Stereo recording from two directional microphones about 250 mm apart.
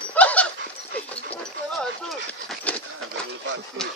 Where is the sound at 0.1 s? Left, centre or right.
Centre.